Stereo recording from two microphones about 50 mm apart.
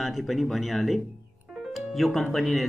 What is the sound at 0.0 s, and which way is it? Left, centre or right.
Speech, centre.